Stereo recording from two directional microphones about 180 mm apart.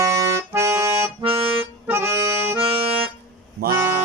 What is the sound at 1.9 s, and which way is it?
Accordion, 15° right (ahead or behind).